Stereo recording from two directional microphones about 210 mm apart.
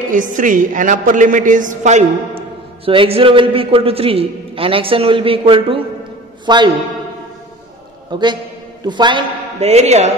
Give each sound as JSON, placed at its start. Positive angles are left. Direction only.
{"t": 0.1, "sound": "a woman's voice", "side_deg": -40}
{"t": 8.1, "sound": "a woman's voice", "side_deg": -20}